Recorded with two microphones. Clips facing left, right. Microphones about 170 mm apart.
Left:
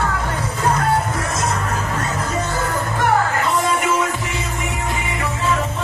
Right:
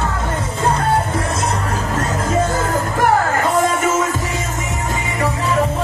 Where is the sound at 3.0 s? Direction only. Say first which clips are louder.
Right 2 dB; 45° right (ahead or behind).